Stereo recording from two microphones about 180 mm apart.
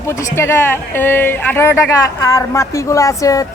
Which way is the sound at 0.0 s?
15° left (ahead or behind).